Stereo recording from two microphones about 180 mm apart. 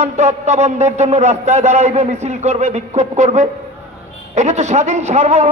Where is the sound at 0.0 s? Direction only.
40° right (ahead or behind).